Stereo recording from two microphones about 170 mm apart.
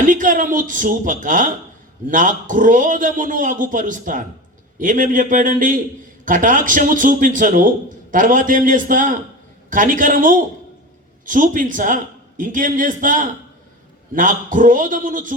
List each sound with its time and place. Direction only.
0.0 s a man's voice: 50° right (ahead or behind)